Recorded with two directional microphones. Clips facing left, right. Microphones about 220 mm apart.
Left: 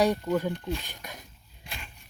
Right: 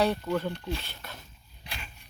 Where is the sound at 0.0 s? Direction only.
15° left (ahead or behind).